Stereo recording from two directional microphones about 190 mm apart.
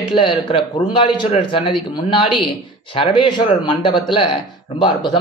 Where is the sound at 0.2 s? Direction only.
30° left (ahead or behind).